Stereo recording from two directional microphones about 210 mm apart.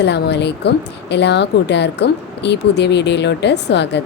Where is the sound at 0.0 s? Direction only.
55° left (ahead or behind).